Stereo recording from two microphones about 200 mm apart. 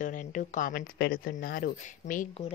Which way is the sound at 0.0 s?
40° left (ahead or behind).